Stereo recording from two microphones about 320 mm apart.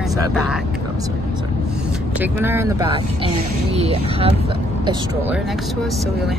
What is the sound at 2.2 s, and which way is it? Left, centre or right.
Speech, centre.